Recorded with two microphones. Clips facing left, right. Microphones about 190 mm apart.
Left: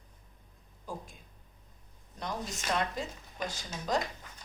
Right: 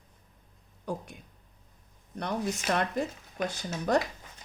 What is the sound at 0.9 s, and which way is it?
Speech, 70° right (ahead or behind).